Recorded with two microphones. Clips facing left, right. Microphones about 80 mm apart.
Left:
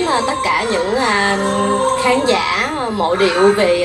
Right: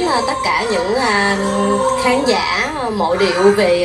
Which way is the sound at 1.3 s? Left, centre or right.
Left.